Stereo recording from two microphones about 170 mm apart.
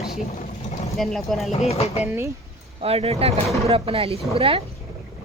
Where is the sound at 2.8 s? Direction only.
35° right (ahead or behind).